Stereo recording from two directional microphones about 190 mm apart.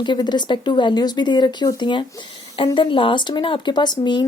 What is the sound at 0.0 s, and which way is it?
Speech, 25° left (ahead or behind).